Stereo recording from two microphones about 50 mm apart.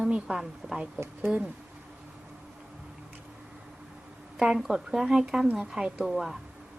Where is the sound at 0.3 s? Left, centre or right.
Right.